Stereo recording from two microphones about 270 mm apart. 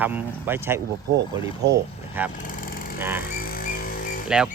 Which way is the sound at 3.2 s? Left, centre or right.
Left.